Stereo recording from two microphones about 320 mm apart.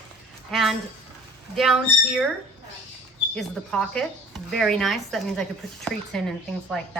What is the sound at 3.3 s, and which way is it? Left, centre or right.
Speech, centre.